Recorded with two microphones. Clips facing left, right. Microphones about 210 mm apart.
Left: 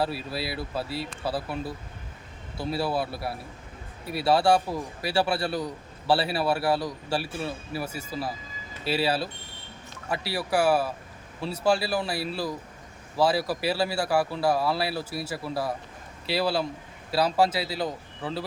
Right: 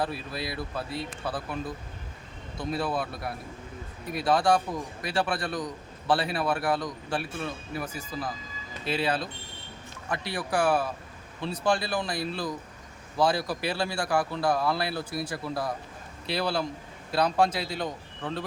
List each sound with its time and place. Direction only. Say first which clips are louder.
0.5 s speech: left 2 dB; 30° left (ahead or behind)
1.3 s speech: left 3 dB; 5° left (ahead or behind)